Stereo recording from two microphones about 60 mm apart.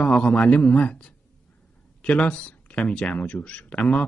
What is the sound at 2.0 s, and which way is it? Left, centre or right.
Speech, left.